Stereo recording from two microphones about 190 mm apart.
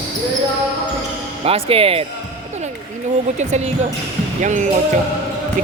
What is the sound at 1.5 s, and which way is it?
Speech, 30° right (ahead or behind).